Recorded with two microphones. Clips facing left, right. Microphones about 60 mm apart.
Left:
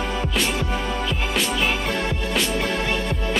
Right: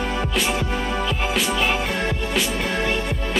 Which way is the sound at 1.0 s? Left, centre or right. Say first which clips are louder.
Right 1 dB; centre.